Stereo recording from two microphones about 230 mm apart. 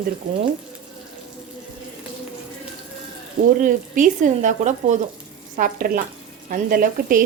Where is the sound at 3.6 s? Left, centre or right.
Right.